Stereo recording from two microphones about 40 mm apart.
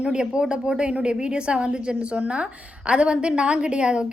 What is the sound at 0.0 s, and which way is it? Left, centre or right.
A woman's voice, right.